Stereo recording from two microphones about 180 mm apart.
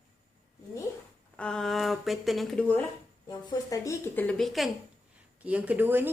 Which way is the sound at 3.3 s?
20° left (ahead or behind).